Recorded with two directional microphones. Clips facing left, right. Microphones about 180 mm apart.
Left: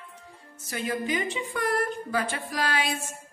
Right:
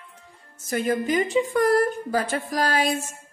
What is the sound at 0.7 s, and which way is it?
A woman's voice, 45° right (ahead or behind).